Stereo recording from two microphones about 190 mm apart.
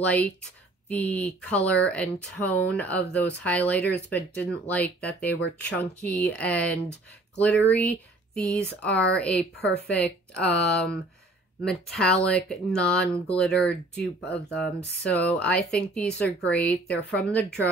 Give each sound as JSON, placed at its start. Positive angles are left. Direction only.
{"t": 0.0, "sound": "speech", "side_deg": 5}